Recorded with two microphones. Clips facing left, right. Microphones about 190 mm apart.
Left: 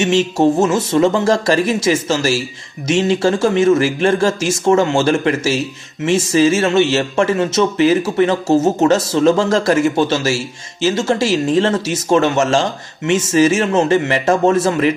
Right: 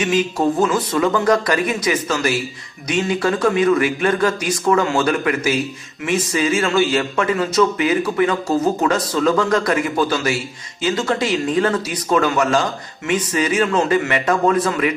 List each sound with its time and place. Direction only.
0.0 s a man's voice: 25° left (ahead or behind)